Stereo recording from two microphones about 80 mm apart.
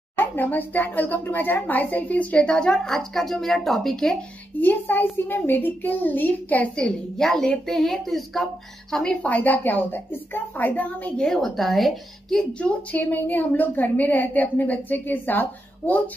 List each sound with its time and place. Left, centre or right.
0.2 s speech: left; by 4.2 s centre
4.6 s a woman's voice: left
7.2 s a woman's voice: centre
11.2 s a woman's voice: centre; by 15.4 s left